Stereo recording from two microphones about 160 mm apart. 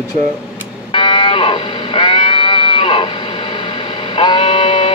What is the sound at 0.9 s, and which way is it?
Music, 30° left (ahead or behind).